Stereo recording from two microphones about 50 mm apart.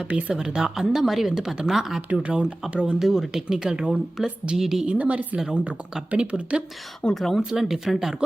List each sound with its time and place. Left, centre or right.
0.1 s speech: right
0.3 s speech: centre
4.5 s speech: centre
4.9 s speech: right
7.1 s speech: centre
7.5 s speech: centre